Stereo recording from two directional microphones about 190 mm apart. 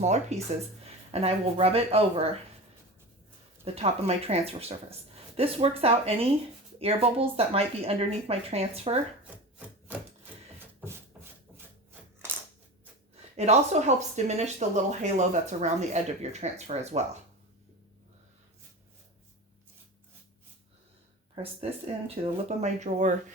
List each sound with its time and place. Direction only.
0.0 s speech: 35° right (ahead or behind)
3.6 s speech: 35° right (ahead or behind)
9.2 s rub: 10° right (ahead or behind)
11.1 s rub: 5° right (ahead or behind)
13.3 s speech: 35° right (ahead or behind)
21.3 s speech: 30° right (ahead or behind)